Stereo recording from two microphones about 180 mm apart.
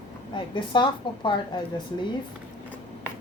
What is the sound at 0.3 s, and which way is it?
Speech, 25° left (ahead or behind).